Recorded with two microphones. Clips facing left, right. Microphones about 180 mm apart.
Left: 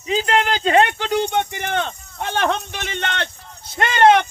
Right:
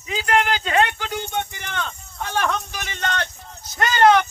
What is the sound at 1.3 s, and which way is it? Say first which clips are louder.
Speech: left 6 dB; 60° left (ahead or behind).